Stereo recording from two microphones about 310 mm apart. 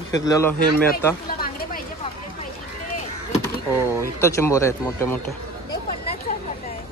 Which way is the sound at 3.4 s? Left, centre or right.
Centre.